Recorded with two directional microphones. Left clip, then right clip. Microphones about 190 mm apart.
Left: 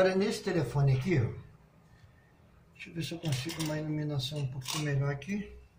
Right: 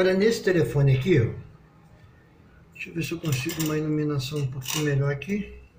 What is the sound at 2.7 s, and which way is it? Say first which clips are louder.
Speech: right 9 dB; centre (ahead or behind).